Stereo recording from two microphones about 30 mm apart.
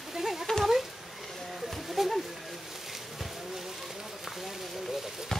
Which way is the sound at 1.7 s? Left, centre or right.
Centre.